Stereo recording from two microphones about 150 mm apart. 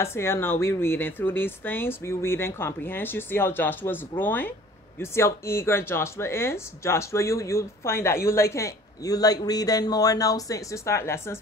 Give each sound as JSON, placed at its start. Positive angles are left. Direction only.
{"t": 0.0, "sound": "speech", "side_deg": 15}